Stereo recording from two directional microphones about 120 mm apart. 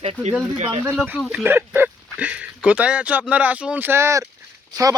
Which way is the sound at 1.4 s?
20° right (ahead or behind).